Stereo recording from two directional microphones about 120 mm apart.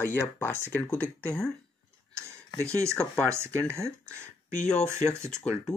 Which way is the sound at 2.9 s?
10° left (ahead or behind).